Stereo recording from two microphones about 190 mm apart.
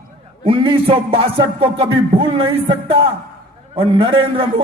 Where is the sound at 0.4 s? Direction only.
25° right (ahead or behind).